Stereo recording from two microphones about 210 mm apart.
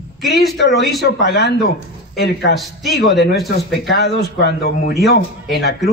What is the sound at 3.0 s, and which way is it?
Speech, 55° left (ahead or behind).